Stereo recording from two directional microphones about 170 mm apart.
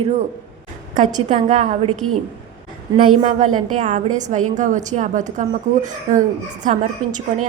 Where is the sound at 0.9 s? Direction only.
35° right (ahead or behind).